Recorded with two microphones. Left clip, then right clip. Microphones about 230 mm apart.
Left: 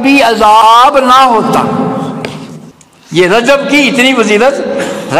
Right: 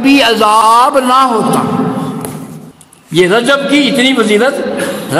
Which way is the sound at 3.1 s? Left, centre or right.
Right.